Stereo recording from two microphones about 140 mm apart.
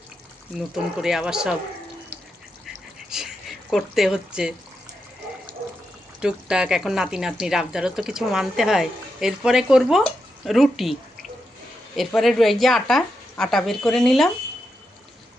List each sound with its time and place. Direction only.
0.5 s speech: 5° right (ahead or behind)
3.1 s a sound: 5° right (ahead or behind)
6.1 s speech: 5° right (ahead or behind)
11.9 s speech: centre (ahead or behind)